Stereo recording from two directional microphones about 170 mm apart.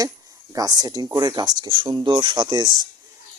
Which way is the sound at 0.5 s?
20° right (ahead or behind).